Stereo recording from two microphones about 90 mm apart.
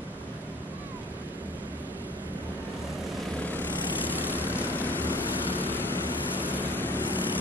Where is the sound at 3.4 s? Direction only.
20° left (ahead or behind).